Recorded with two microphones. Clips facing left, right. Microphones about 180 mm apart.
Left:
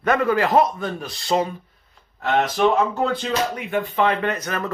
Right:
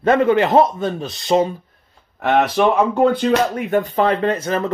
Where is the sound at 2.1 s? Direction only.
70° right (ahead or behind).